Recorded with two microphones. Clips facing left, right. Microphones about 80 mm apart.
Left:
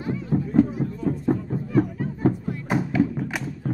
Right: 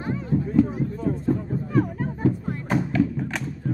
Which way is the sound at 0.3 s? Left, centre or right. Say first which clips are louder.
Left 1 dB; left.